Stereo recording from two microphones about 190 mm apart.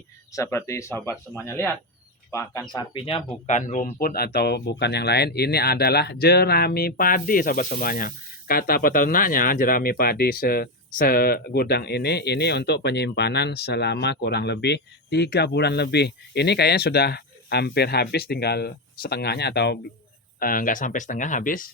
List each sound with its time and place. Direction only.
0.3 s speech: 15° left (ahead or behind); by 3.9 s 40° left (ahead or behind)
4.0 s speech: 55° left (ahead or behind)
20.4 s speech: 50° left (ahead or behind)